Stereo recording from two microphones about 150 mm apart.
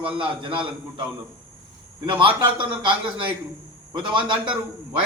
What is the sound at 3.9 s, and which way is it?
Speech, 30° right (ahead or behind).